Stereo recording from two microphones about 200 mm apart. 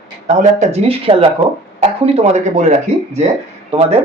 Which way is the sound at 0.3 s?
35° right (ahead or behind).